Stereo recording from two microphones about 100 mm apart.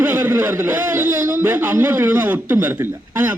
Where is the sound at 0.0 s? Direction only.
20° right (ahead or behind).